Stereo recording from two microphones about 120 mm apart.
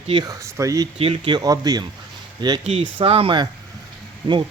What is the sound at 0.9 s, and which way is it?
Speech, 50° right (ahead or behind).